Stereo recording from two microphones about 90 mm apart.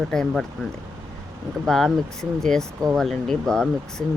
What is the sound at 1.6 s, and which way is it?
Speech, 5° left (ahead or behind).